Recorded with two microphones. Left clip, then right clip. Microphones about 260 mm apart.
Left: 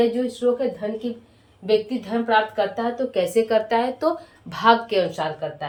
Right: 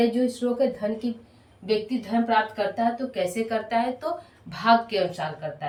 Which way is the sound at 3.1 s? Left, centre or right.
Centre.